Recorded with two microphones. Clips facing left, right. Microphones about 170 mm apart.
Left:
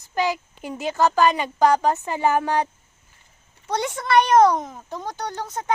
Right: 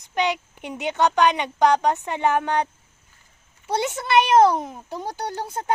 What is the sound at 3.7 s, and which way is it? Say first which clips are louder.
Speech: right 1 dB; 25° right (ahead or behind).